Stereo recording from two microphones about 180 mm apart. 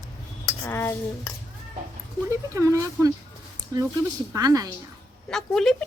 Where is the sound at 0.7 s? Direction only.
15° left (ahead or behind).